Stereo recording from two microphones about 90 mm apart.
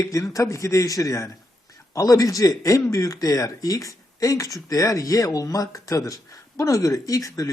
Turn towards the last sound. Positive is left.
turn(degrees=40)  # may be behind; listen again after turning